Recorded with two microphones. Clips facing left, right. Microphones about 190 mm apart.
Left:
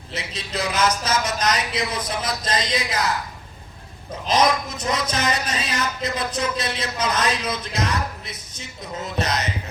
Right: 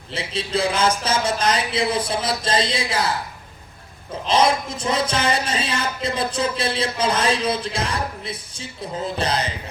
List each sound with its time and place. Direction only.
0.1 s speech: 30° right (ahead or behind)
4.3 s speech: 30° right (ahead or behind)